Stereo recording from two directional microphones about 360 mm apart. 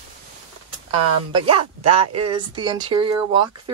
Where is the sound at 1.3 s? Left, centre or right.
Centre.